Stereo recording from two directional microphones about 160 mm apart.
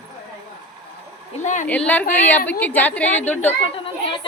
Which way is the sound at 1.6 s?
10° left (ahead or behind).